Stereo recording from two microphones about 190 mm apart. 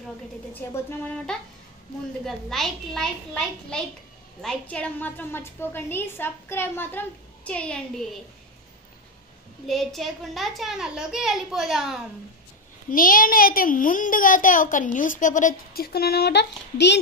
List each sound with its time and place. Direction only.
0.5 s a woman's voice: 10° left (ahead or behind)
9.7 s a woman's voice: centre (ahead or behind)
12.9 s a woman's voice: 45° left (ahead or behind); by 17.0 s 65° left (ahead or behind)